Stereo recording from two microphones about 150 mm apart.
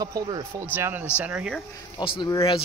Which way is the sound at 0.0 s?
25° right (ahead or behind).